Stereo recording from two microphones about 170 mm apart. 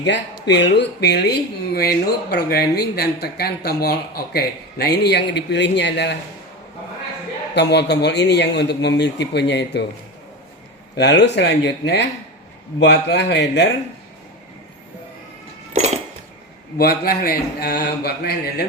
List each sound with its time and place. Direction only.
0.0 s speech: 90° left
7.5 s a man's voice: 85° left
10.9 s a man's voice: 85° left
16.7 s a man's voice: 65° left (ahead or behind)